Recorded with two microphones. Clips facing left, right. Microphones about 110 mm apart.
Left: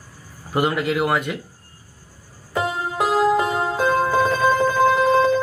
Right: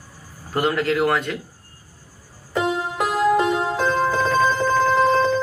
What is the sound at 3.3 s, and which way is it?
Music, 10° left (ahead or behind).